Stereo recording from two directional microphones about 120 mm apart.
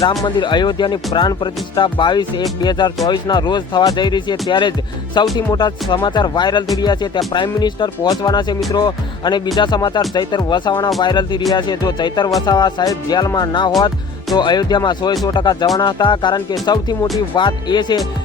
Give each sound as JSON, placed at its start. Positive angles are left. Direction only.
{"t": 0.3, "sound": "speech", "side_deg": 40}